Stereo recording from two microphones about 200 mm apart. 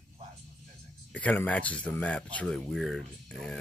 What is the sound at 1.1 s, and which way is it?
Speech, 5° left (ahead or behind).